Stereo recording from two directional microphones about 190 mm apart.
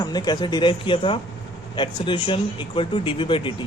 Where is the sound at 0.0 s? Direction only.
20° left (ahead or behind).